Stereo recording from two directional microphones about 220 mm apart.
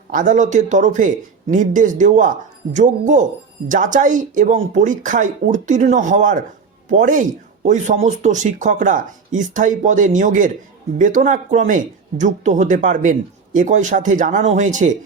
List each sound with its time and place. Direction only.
0.1 s speech: 35° right (ahead or behind)